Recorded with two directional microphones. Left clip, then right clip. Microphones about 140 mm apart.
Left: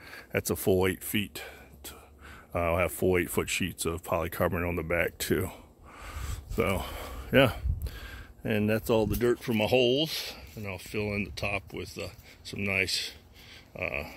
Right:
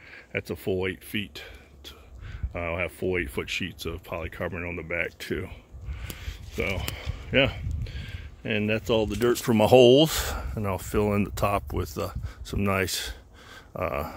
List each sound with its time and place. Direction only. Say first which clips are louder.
0.1 s speech: left 1 dB; 40° left (ahead or behind)
1.1 s speech: even; 35° left (ahead or behind)
6.0 s a sound: right 2 dB; 45° left (ahead or behind)
8.5 s speech: right 2 dB; 10° left (ahead or behind)
8.8 s speech: right 2 dB; centre (ahead or behind)
9.4 s speech: right 7 dB; 45° right (ahead or behind)
9.7 s speech: right 9 dB; 90° right
10.5 s speech: right 9 dB; 55° right (ahead or behind)